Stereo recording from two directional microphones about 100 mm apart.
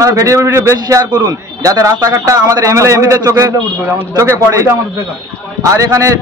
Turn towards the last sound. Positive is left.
turn(degrees=-35)  # may be behind; listen again after turning